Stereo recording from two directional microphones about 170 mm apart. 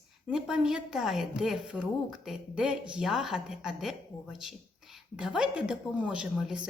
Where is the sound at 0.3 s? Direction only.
5° right (ahead or behind).